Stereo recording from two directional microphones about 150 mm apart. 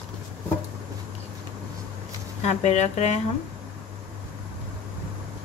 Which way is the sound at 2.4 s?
50° left (ahead or behind).